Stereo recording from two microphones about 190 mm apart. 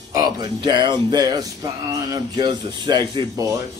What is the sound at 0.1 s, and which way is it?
Speech, 20° right (ahead or behind).